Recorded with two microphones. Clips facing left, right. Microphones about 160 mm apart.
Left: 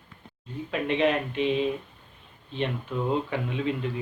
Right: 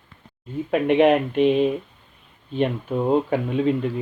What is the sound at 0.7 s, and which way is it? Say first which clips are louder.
Speech: right 8 dB; 55° right (ahead or behind).